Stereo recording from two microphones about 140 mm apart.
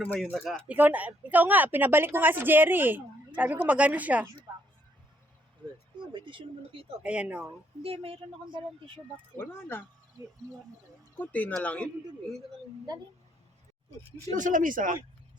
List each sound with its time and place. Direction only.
0.0 s speech: 5° left (ahead or behind)
0.7 s speech: 10° right (ahead or behind)
6.1 s speech: 35° right (ahead or behind)
7.0 s speech: 10° right (ahead or behind)
7.8 s speech: 45° right (ahead or behind)
9.3 s speech: 15° left (ahead or behind)
11.2 s speech: 10° left (ahead or behind)
14.3 s speech: 65° right (ahead or behind)